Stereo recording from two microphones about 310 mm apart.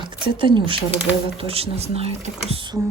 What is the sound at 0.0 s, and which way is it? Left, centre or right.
Speech, centre.